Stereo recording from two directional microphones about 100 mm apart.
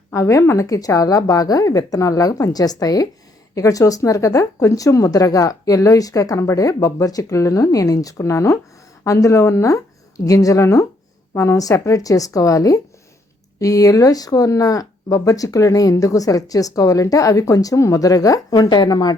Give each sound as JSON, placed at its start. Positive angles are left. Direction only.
{"t": 0.1, "sound": "speech", "side_deg": 35}